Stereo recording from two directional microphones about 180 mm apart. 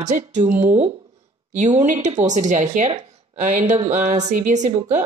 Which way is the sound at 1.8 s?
40° right (ahead or behind).